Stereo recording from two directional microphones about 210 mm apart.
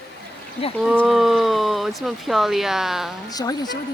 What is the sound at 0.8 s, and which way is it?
Speech, centre (ahead or behind).